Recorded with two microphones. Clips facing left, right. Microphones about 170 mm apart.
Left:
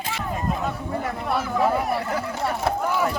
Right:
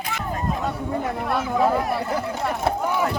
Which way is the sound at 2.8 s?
20° right (ahead or behind).